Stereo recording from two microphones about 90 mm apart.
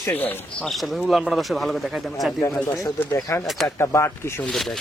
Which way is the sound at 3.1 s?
40° left (ahead or behind).